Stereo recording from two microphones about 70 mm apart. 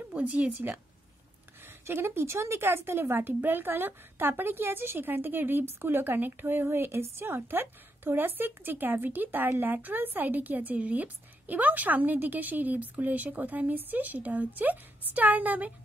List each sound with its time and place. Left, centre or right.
0.1 s a woman's voice: centre